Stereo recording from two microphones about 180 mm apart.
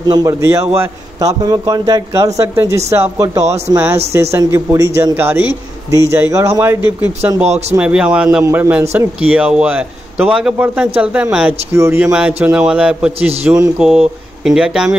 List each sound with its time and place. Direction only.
0.1 s a man's voice: 20° right (ahead or behind)